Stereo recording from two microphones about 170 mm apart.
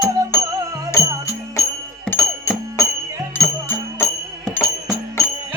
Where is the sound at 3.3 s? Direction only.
15° left (ahead or behind).